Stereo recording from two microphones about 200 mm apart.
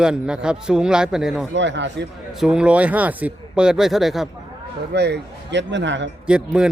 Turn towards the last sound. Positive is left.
turn(degrees=-5)  # may be behind; listen again after turning